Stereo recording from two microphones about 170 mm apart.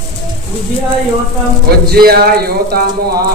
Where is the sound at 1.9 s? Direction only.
65° right (ahead or behind).